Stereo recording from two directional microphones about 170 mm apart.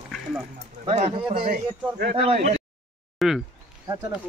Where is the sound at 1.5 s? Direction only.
65° right (ahead or behind).